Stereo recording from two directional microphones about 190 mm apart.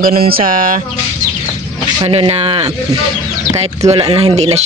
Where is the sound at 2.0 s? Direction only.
30° right (ahead or behind).